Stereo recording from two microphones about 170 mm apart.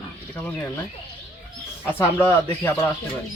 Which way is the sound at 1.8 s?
10° left (ahead or behind).